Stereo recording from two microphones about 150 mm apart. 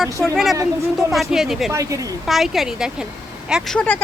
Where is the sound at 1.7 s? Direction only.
20° right (ahead or behind).